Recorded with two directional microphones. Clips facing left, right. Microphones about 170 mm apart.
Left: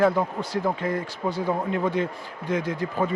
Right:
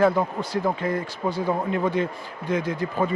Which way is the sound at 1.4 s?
30° right (ahead or behind).